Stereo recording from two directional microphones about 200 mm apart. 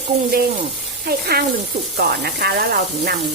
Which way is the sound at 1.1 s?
50° right (ahead or behind).